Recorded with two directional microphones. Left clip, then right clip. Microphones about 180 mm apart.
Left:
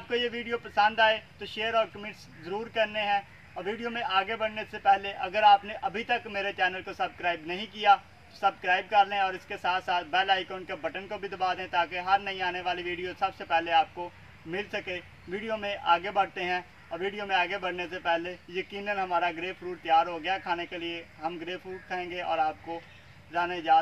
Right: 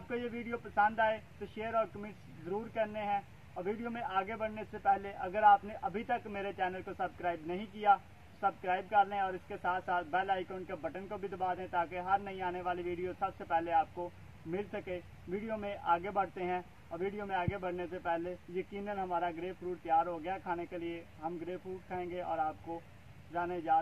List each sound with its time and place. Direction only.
0.1 s speech: 10° left (ahead or behind)